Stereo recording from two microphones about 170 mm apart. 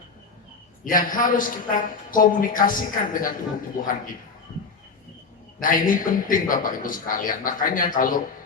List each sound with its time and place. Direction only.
0.9 s a man's voice: 55° left (ahead or behind)
5.5 s a man's voice: 50° left (ahead or behind)